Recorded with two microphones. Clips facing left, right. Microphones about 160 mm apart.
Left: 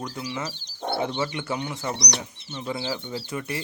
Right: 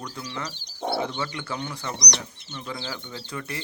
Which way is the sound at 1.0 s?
20° left (ahead or behind).